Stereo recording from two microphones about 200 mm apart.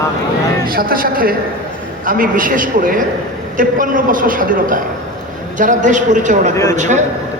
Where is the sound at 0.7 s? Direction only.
45° right (ahead or behind).